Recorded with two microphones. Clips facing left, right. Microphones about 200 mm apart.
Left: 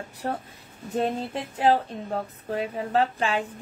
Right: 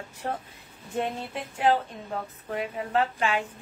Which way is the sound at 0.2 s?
35° left (ahead or behind).